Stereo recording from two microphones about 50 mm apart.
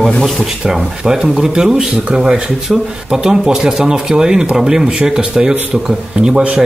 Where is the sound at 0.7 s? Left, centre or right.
Centre.